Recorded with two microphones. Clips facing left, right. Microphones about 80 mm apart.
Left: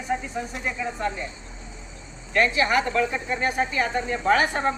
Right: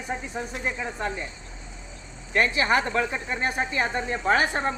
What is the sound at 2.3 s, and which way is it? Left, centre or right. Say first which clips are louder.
Speech: left 1 dB; right.